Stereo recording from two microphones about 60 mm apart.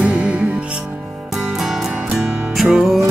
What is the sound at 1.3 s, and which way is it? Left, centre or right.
Music, centre.